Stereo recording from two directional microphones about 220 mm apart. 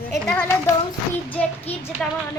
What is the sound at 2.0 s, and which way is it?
Speech, 5° left (ahead or behind).